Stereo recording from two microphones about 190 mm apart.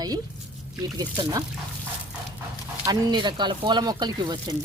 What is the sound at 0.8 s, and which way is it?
Speech, 20° right (ahead or behind).